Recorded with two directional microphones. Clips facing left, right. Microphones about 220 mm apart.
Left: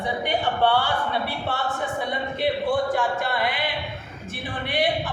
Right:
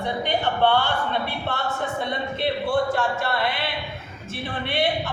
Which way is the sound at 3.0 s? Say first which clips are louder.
Even; 15° left (ahead or behind).